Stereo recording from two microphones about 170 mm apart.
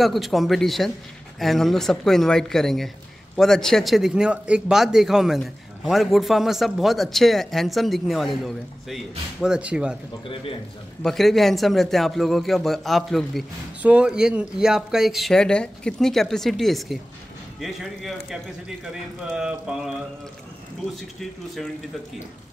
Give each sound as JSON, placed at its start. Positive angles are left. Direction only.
{"t": 0.0, "sound": "a man's voice", "side_deg": 0}
{"t": 10.2, "sound": "a man's voice", "side_deg": 30}
{"t": 11.0, "sound": "a man's voice", "side_deg": 0}